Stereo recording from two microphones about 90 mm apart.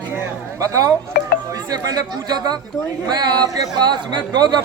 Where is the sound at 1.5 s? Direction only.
45° right (ahead or behind).